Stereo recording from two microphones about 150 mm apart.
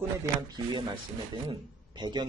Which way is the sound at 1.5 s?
30° right (ahead or behind).